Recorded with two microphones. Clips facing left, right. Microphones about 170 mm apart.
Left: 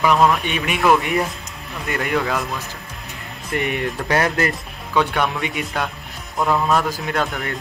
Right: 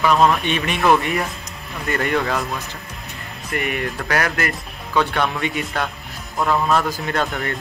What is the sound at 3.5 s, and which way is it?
Speech, 20° left (ahead or behind).